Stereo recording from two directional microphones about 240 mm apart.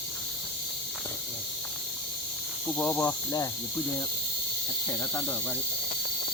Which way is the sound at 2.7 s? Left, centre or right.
Centre.